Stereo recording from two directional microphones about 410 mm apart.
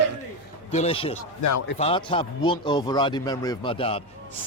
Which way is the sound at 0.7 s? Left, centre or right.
Centre.